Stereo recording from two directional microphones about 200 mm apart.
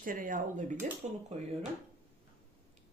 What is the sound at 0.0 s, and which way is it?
Speech, 40° right (ahead or behind).